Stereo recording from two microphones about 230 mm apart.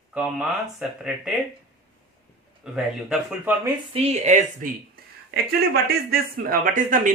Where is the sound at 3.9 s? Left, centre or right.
Right.